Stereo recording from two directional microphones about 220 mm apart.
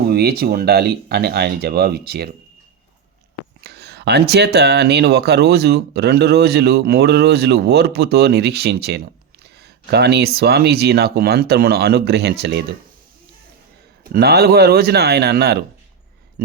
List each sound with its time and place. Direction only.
0.1 s speech: 45° right (ahead or behind)
3.6 s speech: 50° right (ahead or behind)
14.0 s speech: 45° right (ahead or behind)